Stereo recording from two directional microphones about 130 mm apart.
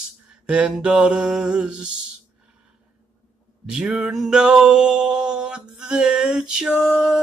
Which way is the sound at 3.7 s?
5° right (ahead or behind).